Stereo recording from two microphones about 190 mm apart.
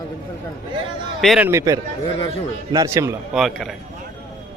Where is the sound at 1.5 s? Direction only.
15° right (ahead or behind).